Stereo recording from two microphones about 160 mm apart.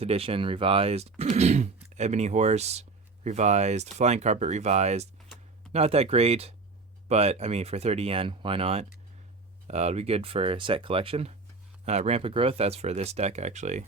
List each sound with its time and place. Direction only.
0.0 s speech: 40° right (ahead or behind)